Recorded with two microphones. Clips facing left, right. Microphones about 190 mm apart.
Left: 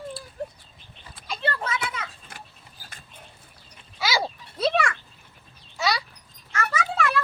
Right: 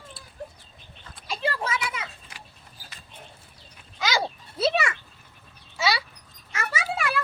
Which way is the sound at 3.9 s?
5° left (ahead or behind).